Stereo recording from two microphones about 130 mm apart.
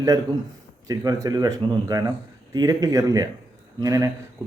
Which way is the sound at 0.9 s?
30° right (ahead or behind).